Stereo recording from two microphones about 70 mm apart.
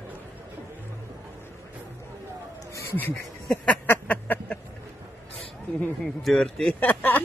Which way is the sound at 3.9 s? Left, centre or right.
Left.